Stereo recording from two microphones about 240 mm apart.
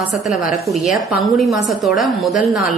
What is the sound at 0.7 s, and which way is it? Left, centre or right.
A woman's voice, centre.